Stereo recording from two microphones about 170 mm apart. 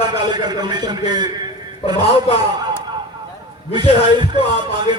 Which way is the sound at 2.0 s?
35° left (ahead or behind).